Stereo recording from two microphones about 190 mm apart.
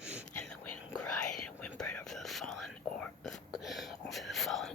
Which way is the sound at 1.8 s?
Centre (ahead or behind).